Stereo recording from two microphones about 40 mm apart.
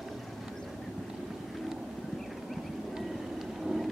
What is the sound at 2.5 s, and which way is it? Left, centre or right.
Vehicle, centre.